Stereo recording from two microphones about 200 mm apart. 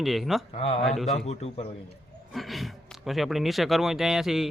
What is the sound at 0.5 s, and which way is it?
Speech, 30° left (ahead or behind).